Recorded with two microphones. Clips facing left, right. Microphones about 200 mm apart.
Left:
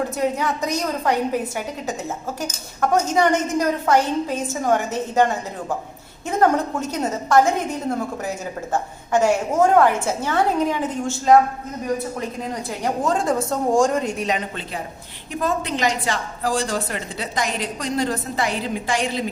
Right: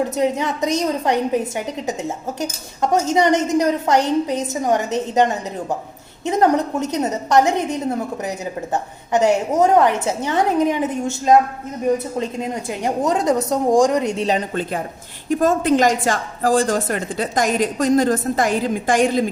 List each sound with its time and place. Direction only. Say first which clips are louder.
0.2 s a woman's voice: right 2 dB; 20° right (ahead or behind)
15.3 s a woman's voice: right 8 dB; 45° right (ahead or behind)